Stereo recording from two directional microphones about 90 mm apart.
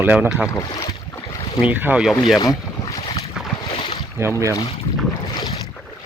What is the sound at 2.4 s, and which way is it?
Boat, 45° left (ahead or behind).